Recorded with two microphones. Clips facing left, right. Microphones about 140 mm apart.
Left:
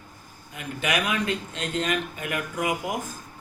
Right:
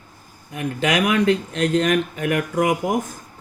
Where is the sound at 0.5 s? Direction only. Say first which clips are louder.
Right 6 dB; 90° right.